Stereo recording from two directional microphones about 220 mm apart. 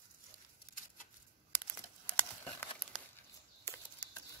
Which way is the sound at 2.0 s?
10° left (ahead or behind).